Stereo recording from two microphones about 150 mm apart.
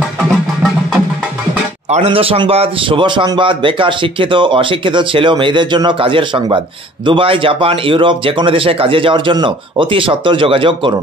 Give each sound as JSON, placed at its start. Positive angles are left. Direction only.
{"t": 1.9, "sound": "a man's voice", "side_deg": -45}